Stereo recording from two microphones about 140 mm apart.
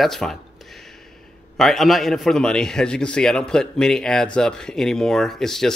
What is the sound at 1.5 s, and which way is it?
A man's voice, centre (ahead or behind).